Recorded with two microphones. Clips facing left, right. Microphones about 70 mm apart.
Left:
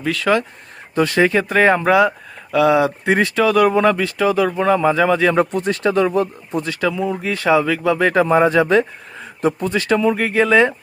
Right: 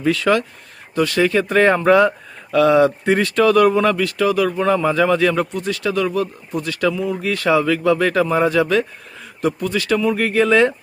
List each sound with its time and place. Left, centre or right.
0.0 s speech: centre
0.9 s speech: left
1.5 s speech: centre; by 10.4 s left